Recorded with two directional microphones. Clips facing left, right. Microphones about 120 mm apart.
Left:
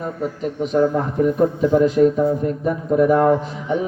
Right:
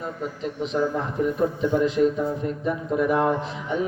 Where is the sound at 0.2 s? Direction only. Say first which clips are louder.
Left 6 dB; 45° left (ahead or behind).